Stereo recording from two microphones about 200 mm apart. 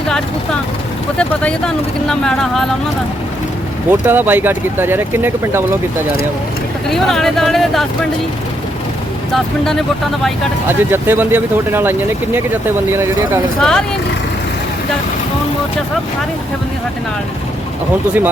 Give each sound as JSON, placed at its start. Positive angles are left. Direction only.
{"t": 1.2, "sound": "speech", "side_deg": 5}
{"t": 4.0, "sound": "speech", "side_deg": -10}
{"t": 6.9, "sound": "speech", "side_deg": 0}
{"t": 9.3, "sound": "speech", "side_deg": 0}
{"t": 10.7, "sound": "speech", "side_deg": -10}
{"t": 13.6, "sound": "speech", "side_deg": 5}